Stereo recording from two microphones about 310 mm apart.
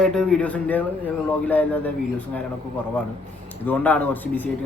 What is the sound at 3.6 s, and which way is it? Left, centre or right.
Speech, centre.